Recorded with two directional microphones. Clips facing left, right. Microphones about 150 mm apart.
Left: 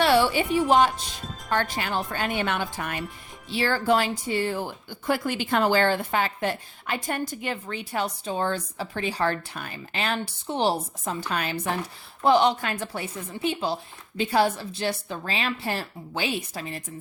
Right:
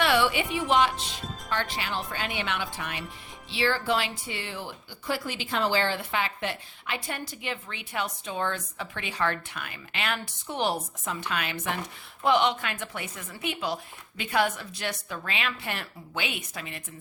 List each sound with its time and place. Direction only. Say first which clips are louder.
0.0 s a woman's voice: left 4 dB; 35° left (ahead or behind)